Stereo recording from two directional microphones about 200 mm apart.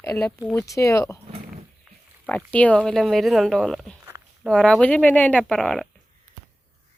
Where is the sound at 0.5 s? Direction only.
15° left (ahead or behind).